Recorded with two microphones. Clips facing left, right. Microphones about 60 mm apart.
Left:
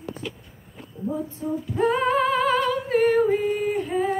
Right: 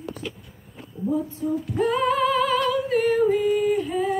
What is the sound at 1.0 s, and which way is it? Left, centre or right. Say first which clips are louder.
Female singing: right 2 dB; centre.